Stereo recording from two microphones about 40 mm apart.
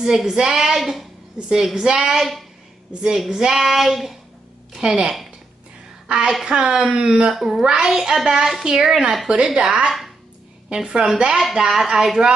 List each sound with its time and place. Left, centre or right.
0.0 s child singing: centre
1.8 s child singing: centre
2.1 s speech: centre
2.9 s a woman's voice: right
3.3 s child singing: centre
4.8 s speech: right
6.0 s a woman's voice: right
7.3 s child singing: centre
9.3 s speech: centre
11.3 s child singing: centre